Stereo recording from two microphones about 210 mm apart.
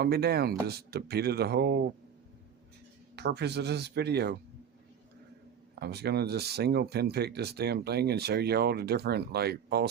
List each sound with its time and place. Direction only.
0.0 s speech: 50° right (ahead or behind)
3.2 s speech: 50° right (ahead or behind)
5.8 s speech: 50° right (ahead or behind)